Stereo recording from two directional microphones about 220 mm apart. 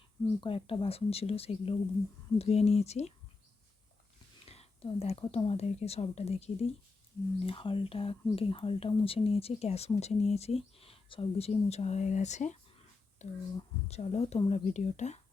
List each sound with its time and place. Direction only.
0.4 s speech: 25° left (ahead or behind)
4.4 s speech: 25° left (ahead or behind)